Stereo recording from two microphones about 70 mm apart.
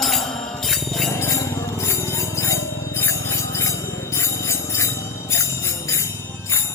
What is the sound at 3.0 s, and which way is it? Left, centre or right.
Music, left.